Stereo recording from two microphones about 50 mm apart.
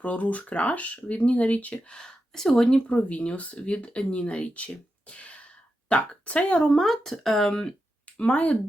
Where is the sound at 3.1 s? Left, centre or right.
Left.